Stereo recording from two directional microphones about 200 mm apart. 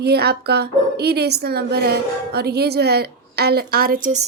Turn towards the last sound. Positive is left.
turn(degrees=-45)  # may be behind; listen again after turning